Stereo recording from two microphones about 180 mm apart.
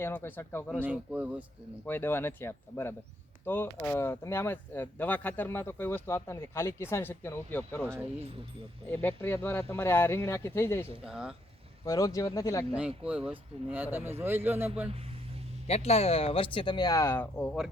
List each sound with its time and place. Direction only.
0.0 s speech: 10° left (ahead or behind)
0.8 s speech: 10° right (ahead or behind)
1.9 s speech: 10° left (ahead or behind)
11.0 s speech: 5° right (ahead or behind)
11.9 s speech: 20° left (ahead or behind)
13.1 s speech: 5° right (ahead or behind)
15.6 s speech: 35° left (ahead or behind); by 17.7 s 5° left (ahead or behind)